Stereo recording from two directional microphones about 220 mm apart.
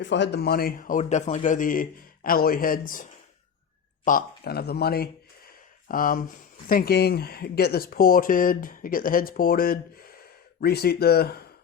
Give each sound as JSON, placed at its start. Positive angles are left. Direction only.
{"t": 0.0, "sound": "speech", "side_deg": 55}